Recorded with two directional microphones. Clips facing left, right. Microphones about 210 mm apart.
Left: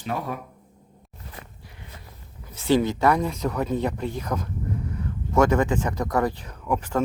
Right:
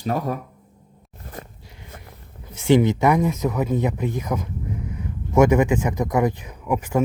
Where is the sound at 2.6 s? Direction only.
20° right (ahead or behind).